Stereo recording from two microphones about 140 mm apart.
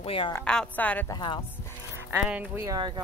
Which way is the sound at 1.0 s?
30° left (ahead or behind).